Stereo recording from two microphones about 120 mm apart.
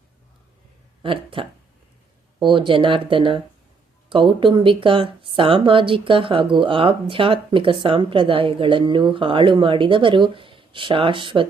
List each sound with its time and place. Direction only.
1.0 s speech: 45° right (ahead or behind)